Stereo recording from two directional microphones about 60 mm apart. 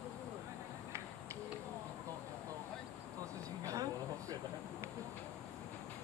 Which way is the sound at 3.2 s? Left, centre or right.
Right.